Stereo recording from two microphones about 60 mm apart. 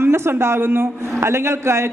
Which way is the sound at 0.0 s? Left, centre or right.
Right.